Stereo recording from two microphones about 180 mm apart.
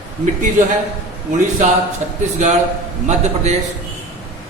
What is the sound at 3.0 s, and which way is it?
Speech, 40° right (ahead or behind).